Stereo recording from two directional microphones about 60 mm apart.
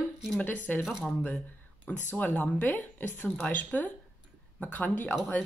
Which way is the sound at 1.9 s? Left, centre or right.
Left.